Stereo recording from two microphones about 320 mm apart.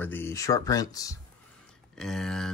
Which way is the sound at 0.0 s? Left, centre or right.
Centre.